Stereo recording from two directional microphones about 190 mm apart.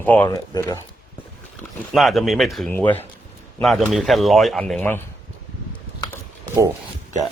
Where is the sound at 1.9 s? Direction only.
Centre (ahead or behind).